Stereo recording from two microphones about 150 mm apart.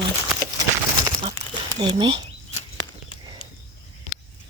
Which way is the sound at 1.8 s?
35° right (ahead or behind).